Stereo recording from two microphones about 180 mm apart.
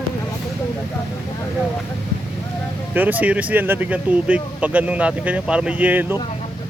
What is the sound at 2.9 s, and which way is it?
Speech, 10° right (ahead or behind).